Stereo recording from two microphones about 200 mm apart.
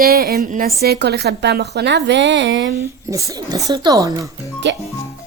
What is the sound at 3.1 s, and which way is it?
Speech, 15° right (ahead or behind).